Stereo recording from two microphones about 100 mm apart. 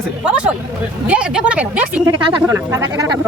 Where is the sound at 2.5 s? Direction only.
30° right (ahead or behind).